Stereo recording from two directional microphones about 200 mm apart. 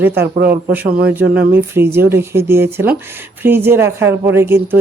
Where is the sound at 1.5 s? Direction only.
10° right (ahead or behind).